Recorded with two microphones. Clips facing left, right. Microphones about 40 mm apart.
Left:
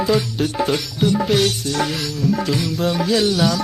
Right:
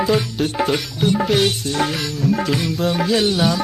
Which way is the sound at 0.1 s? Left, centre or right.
Right.